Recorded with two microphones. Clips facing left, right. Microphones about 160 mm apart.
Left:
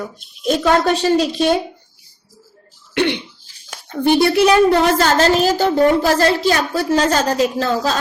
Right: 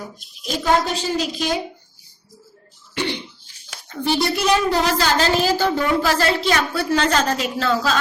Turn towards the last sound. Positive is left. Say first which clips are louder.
# left 2 dB
turn(degrees=40)  # may be behind; listen again after turning